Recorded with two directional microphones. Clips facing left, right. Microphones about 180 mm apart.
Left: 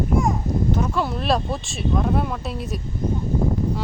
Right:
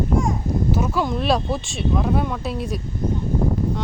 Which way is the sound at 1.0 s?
Centre (ahead or behind).